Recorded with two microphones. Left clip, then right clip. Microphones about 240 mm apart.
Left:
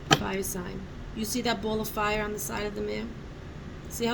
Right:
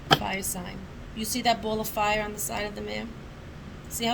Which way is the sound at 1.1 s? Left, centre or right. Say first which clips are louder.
Right 4 dB; right.